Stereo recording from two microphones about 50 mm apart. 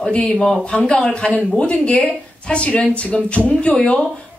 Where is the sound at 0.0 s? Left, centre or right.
Left.